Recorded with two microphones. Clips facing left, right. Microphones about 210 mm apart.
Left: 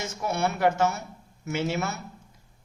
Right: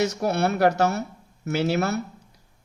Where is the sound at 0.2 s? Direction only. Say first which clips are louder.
Right 4 dB; 65° right (ahead or behind).